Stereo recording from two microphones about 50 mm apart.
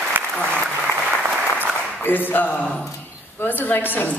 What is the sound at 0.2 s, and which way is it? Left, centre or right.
Applause, right.